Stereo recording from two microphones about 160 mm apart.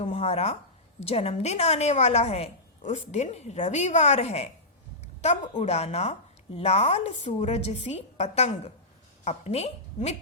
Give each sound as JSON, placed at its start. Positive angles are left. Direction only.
{"t": 0.0, "sound": "a woman's voice", "side_deg": 45}